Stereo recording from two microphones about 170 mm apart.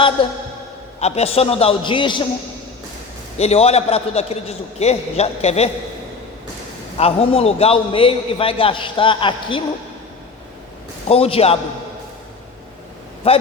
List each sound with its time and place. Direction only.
0.2 s a man's voice: 30° left (ahead or behind)
3.3 s a man's voice: 40° left (ahead or behind)
6.9 s a man's voice: 35° left (ahead or behind)
11.1 s a man's voice: 35° left (ahead or behind)
13.2 s a man's voice: 35° left (ahead or behind)